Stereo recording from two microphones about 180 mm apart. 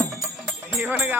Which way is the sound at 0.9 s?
10° right (ahead or behind).